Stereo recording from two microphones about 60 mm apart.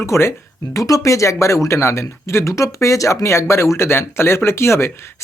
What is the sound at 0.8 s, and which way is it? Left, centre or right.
Speech, left.